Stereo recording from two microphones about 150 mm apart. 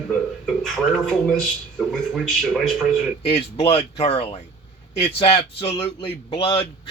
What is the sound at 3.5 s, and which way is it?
A man's voice, 45° left (ahead or behind).